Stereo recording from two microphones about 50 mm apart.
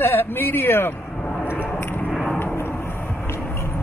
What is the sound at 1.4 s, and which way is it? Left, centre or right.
Vehicle, left.